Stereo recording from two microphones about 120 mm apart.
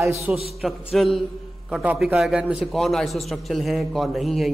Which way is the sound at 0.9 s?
Centre (ahead or behind).